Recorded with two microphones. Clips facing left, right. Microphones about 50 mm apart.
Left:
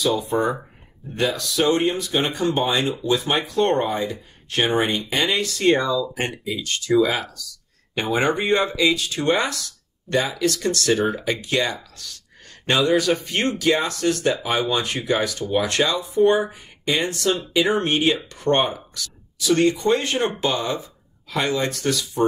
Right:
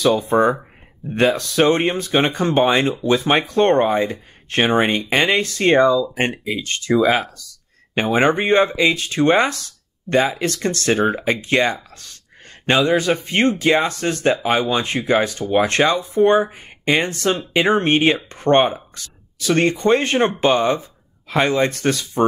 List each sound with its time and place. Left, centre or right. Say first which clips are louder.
0.0 s speech: right 5 dB; right